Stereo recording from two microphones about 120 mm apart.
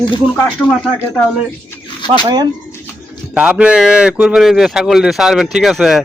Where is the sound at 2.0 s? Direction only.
40° left (ahead or behind).